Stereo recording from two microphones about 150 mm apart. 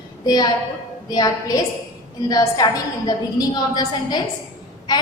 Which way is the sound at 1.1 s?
25° left (ahead or behind).